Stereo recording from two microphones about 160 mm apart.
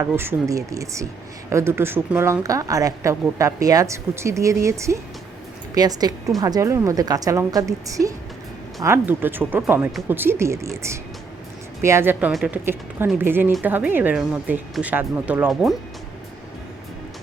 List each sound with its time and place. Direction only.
0.2 s a woman's voice: 15° right (ahead or behind)
12.3 s speech: 5° right (ahead or behind)